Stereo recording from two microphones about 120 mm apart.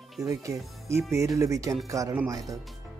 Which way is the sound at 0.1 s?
Centre (ahead or behind).